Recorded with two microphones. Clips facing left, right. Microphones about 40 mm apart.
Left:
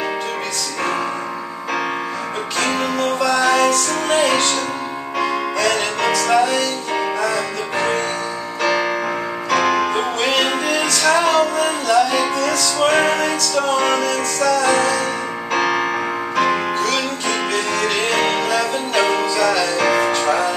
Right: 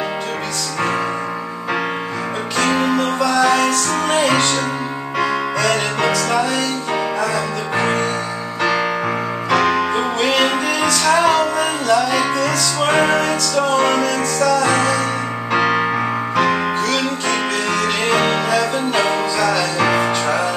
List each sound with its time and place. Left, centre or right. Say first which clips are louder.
2.6 s music: right 3 dB; centre
9.5 s music: right 1 dB; centre
9.9 s music: right 1 dB; centre
16.4 s music: right 1 dB; centre